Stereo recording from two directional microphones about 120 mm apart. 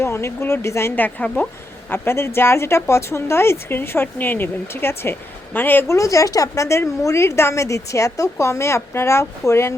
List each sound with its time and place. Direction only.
0.0 s a woman's voice: 20° left (ahead or behind)
6.0 s a woman's voice: 25° left (ahead or behind)